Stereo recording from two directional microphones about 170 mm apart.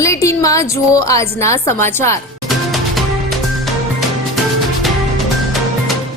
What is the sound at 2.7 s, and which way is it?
Music, centre (ahead or behind).